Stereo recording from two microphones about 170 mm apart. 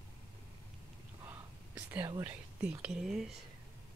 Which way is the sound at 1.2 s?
10° right (ahead or behind).